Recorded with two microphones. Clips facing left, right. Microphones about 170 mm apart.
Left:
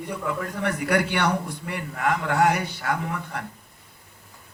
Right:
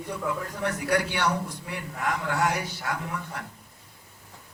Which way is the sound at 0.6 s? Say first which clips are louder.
Left 3 dB; 65° left (ahead or behind).